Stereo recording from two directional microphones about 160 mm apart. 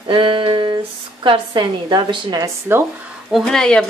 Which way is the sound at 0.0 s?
30° right (ahead or behind).